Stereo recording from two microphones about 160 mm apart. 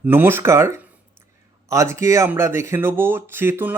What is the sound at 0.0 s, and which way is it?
Speech, 15° right (ahead or behind).